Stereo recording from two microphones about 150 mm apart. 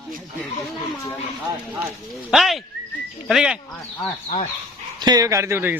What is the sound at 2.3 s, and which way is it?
Speech, centre (ahead or behind).